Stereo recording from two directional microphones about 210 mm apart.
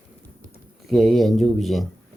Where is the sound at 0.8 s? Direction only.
Centre (ahead or behind).